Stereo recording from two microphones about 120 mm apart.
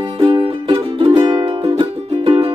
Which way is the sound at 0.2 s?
50° right (ahead or behind).